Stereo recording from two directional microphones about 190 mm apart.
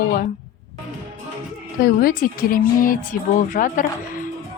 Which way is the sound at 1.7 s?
50° left (ahead or behind).